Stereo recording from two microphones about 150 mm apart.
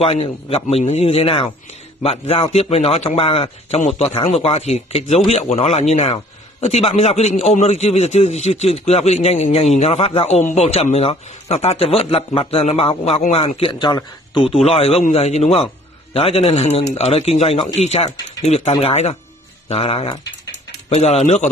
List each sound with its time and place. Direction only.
0.0 s a man's voice: 40° left (ahead or behind)